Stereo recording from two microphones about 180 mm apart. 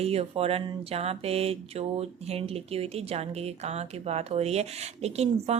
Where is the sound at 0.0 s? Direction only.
35° right (ahead or behind).